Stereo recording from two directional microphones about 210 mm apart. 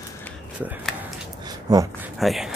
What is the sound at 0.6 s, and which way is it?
Speech, 10° right (ahead or behind).